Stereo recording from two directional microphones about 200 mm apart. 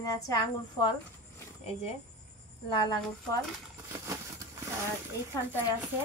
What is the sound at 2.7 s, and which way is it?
Speech, 25° left (ahead or behind).